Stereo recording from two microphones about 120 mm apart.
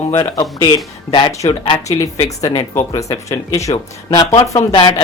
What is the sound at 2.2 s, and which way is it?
Speech, 25° left (ahead or behind).